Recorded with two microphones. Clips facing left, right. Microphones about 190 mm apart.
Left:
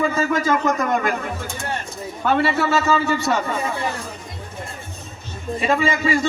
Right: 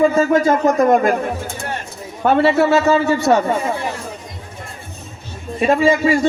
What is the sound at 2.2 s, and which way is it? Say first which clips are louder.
Speech: right 6 dB; 55° right (ahead or behind).